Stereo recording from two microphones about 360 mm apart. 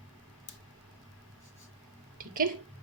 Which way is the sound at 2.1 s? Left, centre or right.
Right.